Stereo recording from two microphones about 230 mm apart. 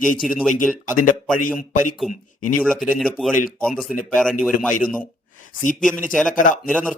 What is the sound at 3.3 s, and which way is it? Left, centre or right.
Speech, left.